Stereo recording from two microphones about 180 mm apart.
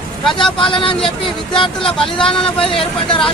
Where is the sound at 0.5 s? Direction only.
30° left (ahead or behind).